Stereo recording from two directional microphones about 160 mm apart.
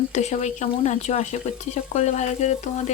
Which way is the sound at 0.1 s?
45° left (ahead or behind).